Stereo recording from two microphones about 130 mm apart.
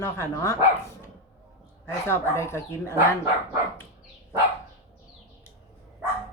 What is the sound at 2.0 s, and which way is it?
Speech, 20° left (ahead or behind).